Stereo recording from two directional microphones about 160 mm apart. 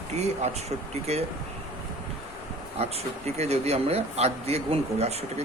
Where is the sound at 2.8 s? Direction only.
40° right (ahead or behind).